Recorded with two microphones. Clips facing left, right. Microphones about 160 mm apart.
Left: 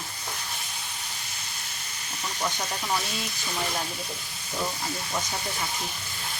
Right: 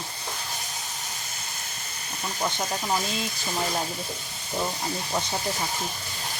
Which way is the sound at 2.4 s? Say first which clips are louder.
Right 3 dB; 20° right (ahead or behind).